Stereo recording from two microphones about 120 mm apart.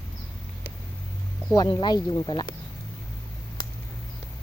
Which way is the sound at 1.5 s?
40° left (ahead or behind).